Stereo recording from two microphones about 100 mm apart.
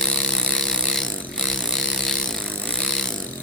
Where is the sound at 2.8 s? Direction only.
5° left (ahead or behind).